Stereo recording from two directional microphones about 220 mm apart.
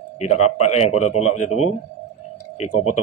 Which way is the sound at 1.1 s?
90° left.